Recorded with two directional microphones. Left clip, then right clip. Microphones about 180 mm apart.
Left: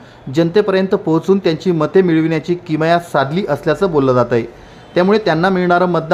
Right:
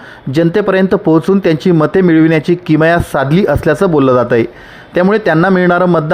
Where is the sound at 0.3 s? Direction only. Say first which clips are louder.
Right 2 dB; 30° right (ahead or behind).